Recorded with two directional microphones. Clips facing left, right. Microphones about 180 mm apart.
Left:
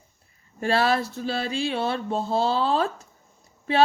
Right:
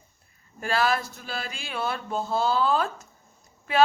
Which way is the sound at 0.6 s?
30° left (ahead or behind).